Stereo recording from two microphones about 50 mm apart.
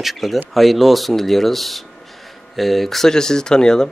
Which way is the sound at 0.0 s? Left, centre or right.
Centre.